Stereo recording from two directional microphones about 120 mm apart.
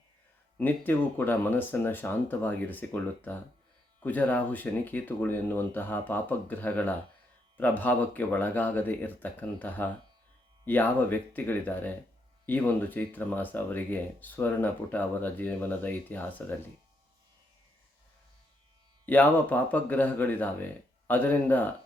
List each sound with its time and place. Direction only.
0.6 s speech: 15° left (ahead or behind)
19.0 s speech: 15° left (ahead or behind)